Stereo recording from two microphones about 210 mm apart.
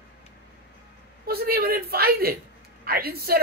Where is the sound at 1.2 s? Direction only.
45° right (ahead or behind).